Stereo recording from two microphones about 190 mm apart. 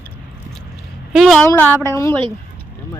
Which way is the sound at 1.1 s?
Centre (ahead or behind).